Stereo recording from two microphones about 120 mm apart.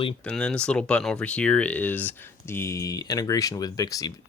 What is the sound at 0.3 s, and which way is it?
Speech, 10° left (ahead or behind).